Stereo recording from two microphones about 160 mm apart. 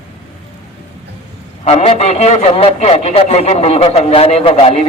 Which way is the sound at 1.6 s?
40° left (ahead or behind).